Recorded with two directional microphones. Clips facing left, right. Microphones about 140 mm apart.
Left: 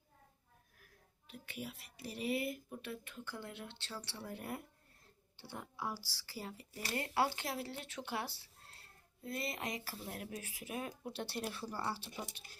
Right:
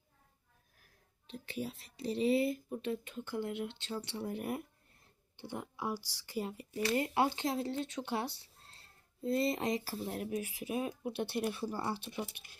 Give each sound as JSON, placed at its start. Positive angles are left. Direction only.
{"t": 1.3, "sound": "speech", "side_deg": -30}